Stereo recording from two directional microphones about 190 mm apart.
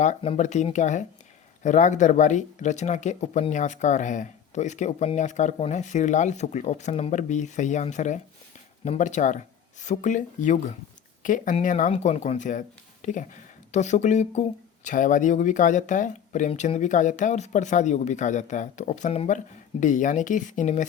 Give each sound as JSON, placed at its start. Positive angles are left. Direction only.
{"t": 0.0, "sound": "speech", "side_deg": 35}